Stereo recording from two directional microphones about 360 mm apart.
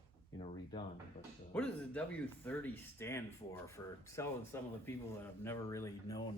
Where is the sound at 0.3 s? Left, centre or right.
Centre.